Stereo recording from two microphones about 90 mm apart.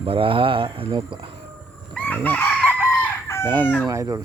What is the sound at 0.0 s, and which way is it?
Speech, 80° right.